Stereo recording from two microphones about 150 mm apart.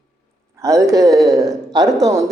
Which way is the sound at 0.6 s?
20° right (ahead or behind).